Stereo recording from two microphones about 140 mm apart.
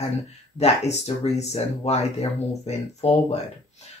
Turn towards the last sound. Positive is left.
turn(degrees=50)  # may be behind; listen again after turning